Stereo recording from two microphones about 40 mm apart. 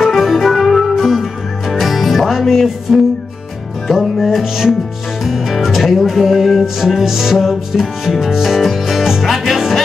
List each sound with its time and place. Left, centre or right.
0.0 s music: centre